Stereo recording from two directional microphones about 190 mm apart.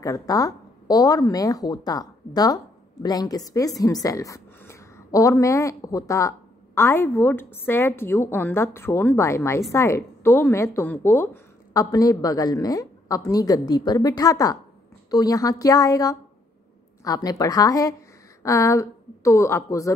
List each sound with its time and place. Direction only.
0.0 s a woman's voice: 20° left (ahead or behind)